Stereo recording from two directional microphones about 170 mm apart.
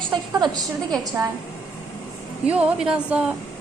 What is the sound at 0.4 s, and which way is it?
Speech, 25° right (ahead or behind).